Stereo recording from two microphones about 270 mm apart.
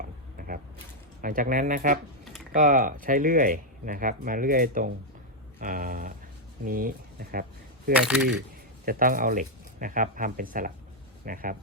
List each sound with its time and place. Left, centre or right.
0.0 s a sound: right
1.2 s speech: right
7.9 s speech: centre
8.8 s speech: right